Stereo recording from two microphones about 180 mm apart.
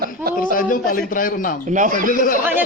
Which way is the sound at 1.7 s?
45° right (ahead or behind).